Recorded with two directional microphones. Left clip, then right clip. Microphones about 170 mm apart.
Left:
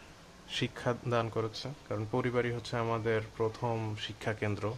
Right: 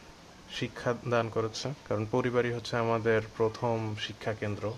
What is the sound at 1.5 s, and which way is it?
Speech, 15° right (ahead or behind).